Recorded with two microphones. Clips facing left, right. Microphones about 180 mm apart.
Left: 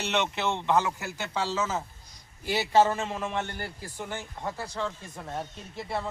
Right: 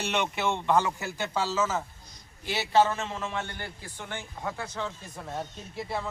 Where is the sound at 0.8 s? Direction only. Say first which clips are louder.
Right 1 dB; 5° left (ahead or behind).